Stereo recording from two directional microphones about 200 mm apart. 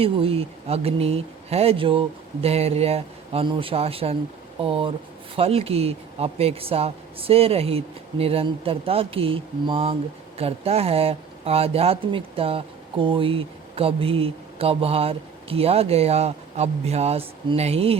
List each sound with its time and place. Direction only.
0.0 s speech: 30° right (ahead or behind)